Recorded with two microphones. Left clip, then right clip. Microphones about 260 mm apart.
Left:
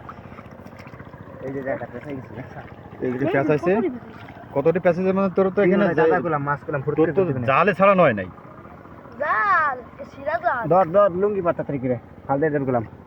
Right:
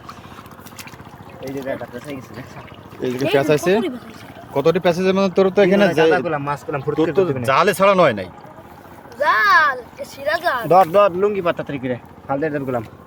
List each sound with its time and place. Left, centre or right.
3.0 s speech: right
9.2 s speech: right
10.7 s speech: centre
11.5 s speech: centre